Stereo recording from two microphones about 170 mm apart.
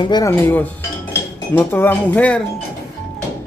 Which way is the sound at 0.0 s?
25° left (ahead or behind).